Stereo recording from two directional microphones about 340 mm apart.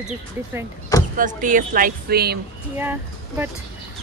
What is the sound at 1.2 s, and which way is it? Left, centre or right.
Speech, right.